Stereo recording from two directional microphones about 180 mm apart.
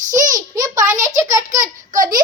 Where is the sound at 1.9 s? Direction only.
45° right (ahead or behind).